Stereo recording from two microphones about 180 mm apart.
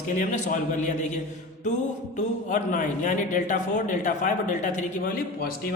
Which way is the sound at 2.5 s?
45° left (ahead or behind).